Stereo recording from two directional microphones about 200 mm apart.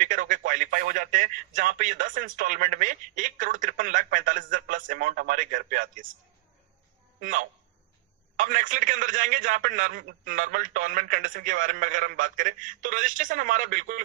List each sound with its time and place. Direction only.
0.0 s speech: 40° right (ahead or behind)
7.2 s a man's voice: 40° right (ahead or behind)